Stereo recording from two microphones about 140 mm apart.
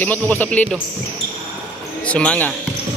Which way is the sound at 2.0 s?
10° left (ahead or behind).